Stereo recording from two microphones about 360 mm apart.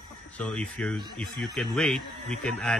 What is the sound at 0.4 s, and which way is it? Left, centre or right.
Speech, centre.